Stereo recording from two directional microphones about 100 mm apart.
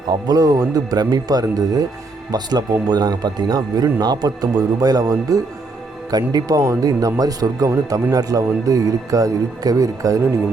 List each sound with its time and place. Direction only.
0.3 s speech: 35° right (ahead or behind)